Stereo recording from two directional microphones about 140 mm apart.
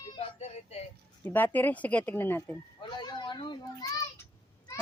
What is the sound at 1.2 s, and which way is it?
Speech, 15° left (ahead or behind).